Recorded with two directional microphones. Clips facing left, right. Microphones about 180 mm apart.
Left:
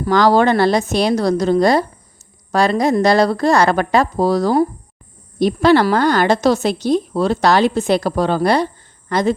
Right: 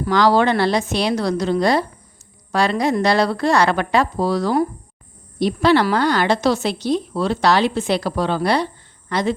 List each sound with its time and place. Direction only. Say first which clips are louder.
0.0 s a woman's voice: left 3 dB; 45° left (ahead or behind)